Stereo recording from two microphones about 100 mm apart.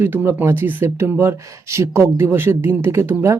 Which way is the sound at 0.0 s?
25° right (ahead or behind).